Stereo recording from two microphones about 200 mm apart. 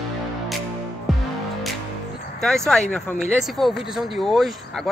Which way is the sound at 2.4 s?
Centre (ahead or behind).